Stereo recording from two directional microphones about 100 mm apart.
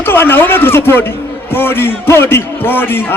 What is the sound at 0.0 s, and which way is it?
A man's voice, 20° left (ahead or behind).